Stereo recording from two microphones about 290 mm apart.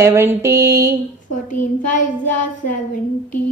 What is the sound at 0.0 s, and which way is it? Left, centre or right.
Speech, centre.